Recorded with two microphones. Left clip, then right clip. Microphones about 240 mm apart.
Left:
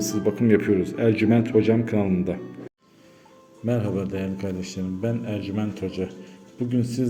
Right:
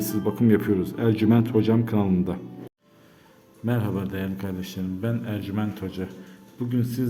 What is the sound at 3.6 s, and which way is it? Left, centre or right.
Speech, centre.